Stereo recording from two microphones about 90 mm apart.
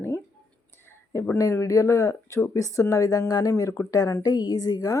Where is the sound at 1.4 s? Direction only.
35° left (ahead or behind).